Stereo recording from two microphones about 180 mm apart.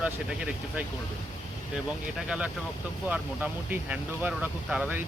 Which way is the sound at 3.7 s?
10° right (ahead or behind).